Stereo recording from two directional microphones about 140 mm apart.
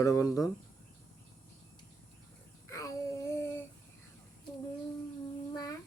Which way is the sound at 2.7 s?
25° left (ahead or behind).